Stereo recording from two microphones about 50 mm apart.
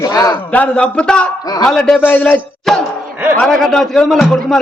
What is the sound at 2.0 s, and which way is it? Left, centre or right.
Speech, left.